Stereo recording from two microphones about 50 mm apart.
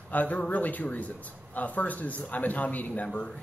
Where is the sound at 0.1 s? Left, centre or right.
Left.